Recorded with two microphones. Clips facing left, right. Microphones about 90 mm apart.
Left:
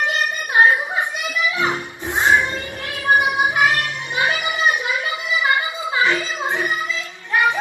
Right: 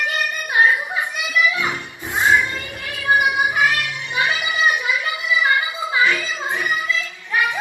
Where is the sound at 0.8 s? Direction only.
20° left (ahead or behind).